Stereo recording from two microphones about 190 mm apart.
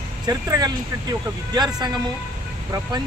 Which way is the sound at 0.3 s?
20° right (ahead or behind).